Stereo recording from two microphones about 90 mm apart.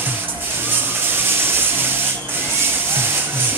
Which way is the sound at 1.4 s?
25° right (ahead or behind).